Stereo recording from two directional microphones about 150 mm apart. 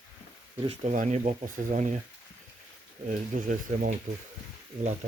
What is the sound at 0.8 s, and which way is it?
Speech, 55° right (ahead or behind).